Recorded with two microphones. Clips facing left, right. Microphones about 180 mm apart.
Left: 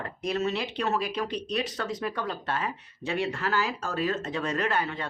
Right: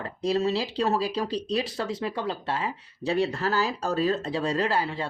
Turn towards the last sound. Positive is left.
turn(degrees=-30)  # may be behind; listen again after turning